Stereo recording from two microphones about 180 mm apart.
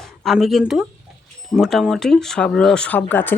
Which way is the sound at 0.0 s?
Centre (ahead or behind).